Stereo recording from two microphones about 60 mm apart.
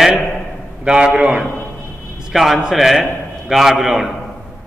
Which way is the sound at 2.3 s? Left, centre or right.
Centre.